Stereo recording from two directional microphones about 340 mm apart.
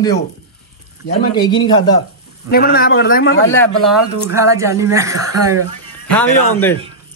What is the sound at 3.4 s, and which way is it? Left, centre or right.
Speech, centre.